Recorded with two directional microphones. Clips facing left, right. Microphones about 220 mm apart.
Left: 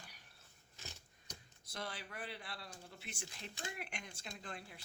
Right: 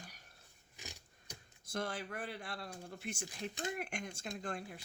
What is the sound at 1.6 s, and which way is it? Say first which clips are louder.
Speech: right 7 dB; 50° right (ahead or behind).